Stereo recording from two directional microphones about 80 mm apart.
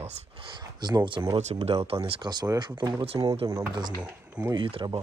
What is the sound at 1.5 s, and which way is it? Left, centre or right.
Speech, right.